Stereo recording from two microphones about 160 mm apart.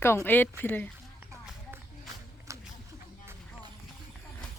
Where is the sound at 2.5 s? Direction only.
20° right (ahead or behind).